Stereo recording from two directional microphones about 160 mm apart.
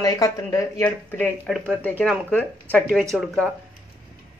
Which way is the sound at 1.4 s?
5° right (ahead or behind).